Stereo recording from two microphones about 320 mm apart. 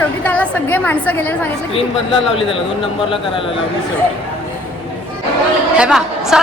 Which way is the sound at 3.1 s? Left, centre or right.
Centre.